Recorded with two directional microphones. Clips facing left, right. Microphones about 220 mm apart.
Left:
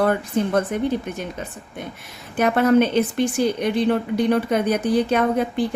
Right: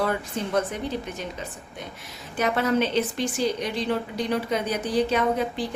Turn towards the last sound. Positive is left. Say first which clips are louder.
# left 4 dB
turn(degrees=55)  # may be behind; listen again after turning